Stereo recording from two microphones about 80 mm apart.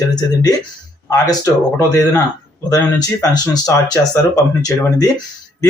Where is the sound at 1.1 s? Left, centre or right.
Left.